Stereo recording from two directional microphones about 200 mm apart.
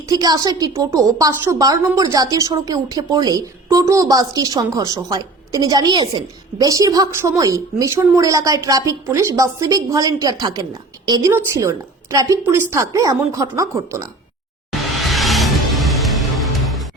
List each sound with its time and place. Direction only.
0.1 s a woman's voice: 20° right (ahead or behind)
15.0 s music: centre (ahead or behind)